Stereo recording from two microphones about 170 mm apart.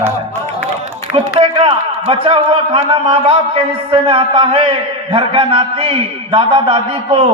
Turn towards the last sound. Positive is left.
turn(degrees=-30)  # may be behind; listen again after turning